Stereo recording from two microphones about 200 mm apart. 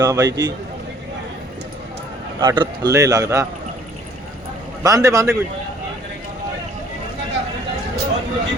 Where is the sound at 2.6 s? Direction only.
15° right (ahead or behind).